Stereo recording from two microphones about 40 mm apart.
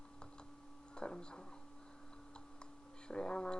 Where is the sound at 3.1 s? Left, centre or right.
Left.